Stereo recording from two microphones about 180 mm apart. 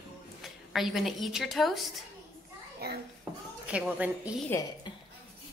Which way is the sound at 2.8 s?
60° right (ahead or behind).